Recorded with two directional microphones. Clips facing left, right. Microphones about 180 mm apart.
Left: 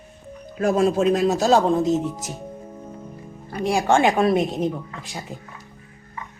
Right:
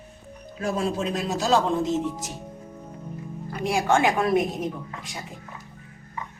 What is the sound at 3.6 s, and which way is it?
A woman's voice, 30° left (ahead or behind).